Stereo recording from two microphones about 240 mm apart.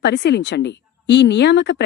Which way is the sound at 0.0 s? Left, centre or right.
Left.